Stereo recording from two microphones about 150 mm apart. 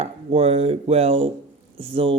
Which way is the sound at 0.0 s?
45° right (ahead or behind).